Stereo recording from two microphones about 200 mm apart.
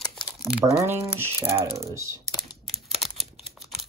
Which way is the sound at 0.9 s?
10° right (ahead or behind).